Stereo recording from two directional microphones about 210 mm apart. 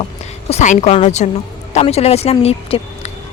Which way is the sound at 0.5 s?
35° left (ahead or behind).